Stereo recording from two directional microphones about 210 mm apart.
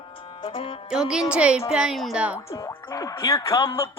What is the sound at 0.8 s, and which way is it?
Speech, 5° right (ahead or behind).